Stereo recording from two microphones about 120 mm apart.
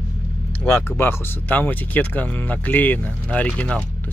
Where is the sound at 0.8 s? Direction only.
20° left (ahead or behind).